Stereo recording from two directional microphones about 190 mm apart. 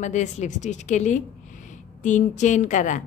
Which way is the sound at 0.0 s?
40° left (ahead or behind).